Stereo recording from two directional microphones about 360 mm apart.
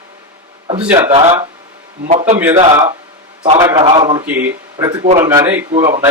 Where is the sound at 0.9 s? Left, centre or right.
Centre.